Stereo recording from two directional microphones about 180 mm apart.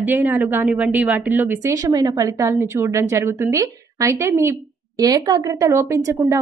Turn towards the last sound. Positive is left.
turn(degrees=-15)  # may be behind; listen again after turning